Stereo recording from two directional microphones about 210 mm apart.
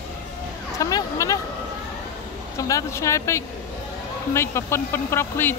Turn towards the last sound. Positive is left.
turn(degrees=10)  # may be behind; listen again after turning